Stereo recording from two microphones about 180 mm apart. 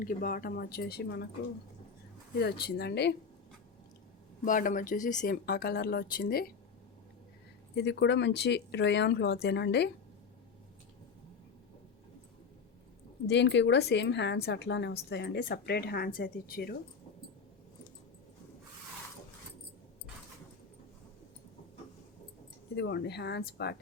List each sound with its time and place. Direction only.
0.0 s speech: 50° left (ahead or behind); by 1.3 s 65° left (ahead or behind)
2.4 s speech: 65° left (ahead or behind)
4.4 s speech: 50° left (ahead or behind)
7.8 s speech: 75° left (ahead or behind)
13.2 s speech: 75° left (ahead or behind); by 16.7 s 55° left (ahead or behind)
22.7 s speech: 70° left (ahead or behind)